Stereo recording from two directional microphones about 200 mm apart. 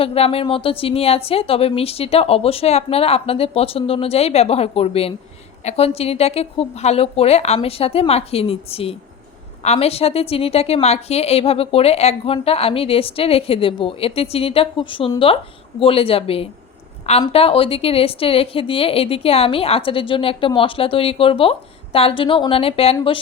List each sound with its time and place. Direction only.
0.0 s a woman's voice: 30° left (ahead or behind)